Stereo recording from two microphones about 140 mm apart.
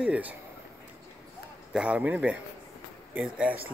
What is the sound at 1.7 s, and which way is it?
Speech, 10° right (ahead or behind).